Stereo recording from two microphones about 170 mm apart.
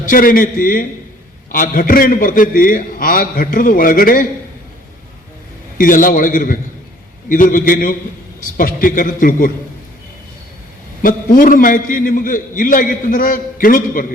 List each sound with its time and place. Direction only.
0.0 s a man's voice: 55° left (ahead or behind)
5.7 s a man's voice: 55° left (ahead or behind)
11.0 s a man's voice: 55° left (ahead or behind)